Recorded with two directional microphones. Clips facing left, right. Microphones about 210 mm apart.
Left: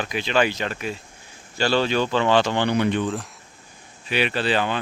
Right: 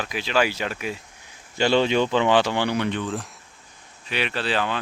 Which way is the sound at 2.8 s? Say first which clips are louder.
Left 4 dB; 10° left (ahead or behind).